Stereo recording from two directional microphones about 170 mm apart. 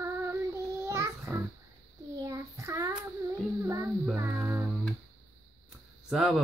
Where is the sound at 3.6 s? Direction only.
15° right (ahead or behind).